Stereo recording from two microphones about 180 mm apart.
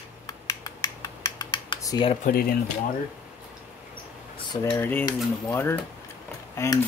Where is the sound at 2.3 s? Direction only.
50° left (ahead or behind).